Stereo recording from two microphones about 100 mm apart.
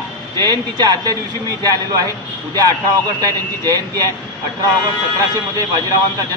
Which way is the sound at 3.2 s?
40° right (ahead or behind).